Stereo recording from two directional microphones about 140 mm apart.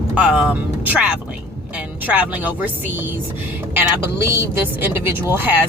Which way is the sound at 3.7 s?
15° right (ahead or behind).